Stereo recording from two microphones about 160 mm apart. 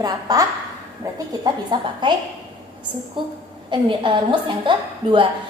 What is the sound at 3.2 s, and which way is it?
A woman's voice, 30° right (ahead or behind).